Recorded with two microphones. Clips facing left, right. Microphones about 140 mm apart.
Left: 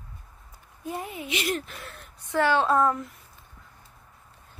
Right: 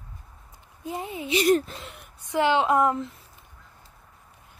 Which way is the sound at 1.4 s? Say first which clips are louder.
Right 11 dB; 40° right (ahead or behind).